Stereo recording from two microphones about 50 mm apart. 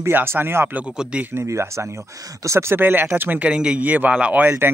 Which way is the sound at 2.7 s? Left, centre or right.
Right.